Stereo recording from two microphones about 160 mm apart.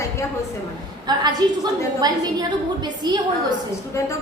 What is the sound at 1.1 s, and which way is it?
A woman's voice, 25° right (ahead or behind).